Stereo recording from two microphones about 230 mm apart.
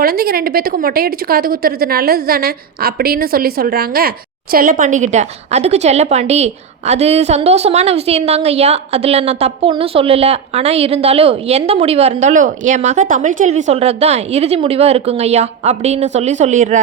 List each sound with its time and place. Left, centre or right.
0.0 s a woman's voice: right